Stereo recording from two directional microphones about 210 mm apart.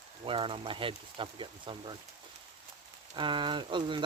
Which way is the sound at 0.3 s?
25° right (ahead or behind).